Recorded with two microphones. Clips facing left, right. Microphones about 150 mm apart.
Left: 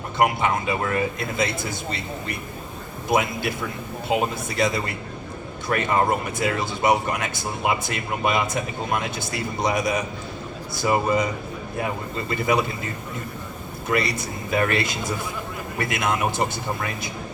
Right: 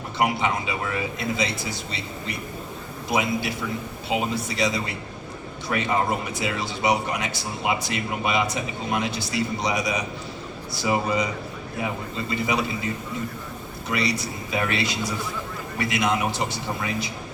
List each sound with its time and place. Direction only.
0.2 s speech: 50° left (ahead or behind)
13.8 s speech: 50° left (ahead or behind)